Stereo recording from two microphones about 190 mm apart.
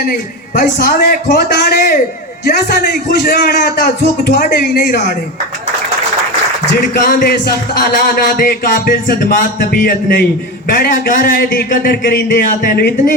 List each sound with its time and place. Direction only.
0.0 s a man's voice: 50° left (ahead or behind)
7.1 s a man's voice: 45° left (ahead or behind)